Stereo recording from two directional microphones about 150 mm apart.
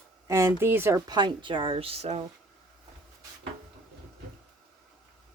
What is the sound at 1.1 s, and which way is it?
Speech, 30° right (ahead or behind).